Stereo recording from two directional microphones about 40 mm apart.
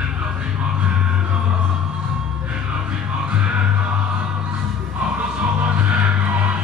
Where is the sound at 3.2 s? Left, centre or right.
Right.